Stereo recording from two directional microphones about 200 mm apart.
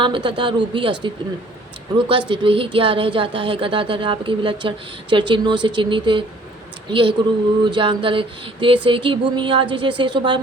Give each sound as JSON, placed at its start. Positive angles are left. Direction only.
{"t": 0.0, "sound": "speech", "side_deg": -25}